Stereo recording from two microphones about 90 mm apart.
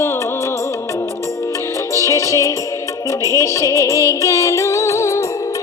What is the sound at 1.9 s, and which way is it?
Music, 35° left (ahead or behind).